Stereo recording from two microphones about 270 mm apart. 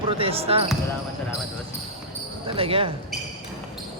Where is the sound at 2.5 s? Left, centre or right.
Centre.